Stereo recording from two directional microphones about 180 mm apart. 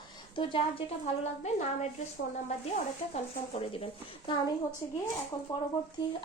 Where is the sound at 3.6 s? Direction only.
30° left (ahead or behind).